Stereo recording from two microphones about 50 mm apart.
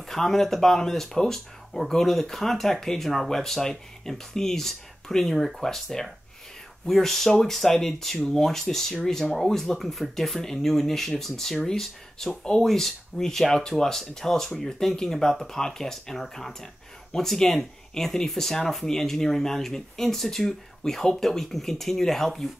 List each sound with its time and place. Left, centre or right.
0.1 s speech: centre